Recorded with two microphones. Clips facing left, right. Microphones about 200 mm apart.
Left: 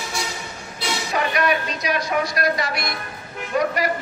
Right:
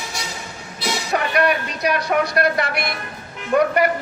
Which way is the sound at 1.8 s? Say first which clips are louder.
Right 3 dB; 60° right (ahead or behind).